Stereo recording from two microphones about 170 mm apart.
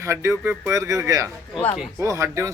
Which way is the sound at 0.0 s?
15° right (ahead or behind).